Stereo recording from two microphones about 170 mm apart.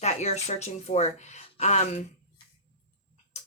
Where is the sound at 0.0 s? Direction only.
40° left (ahead or behind).